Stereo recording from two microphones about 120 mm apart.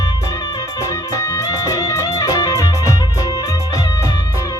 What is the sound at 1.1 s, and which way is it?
Music, 30° left (ahead or behind).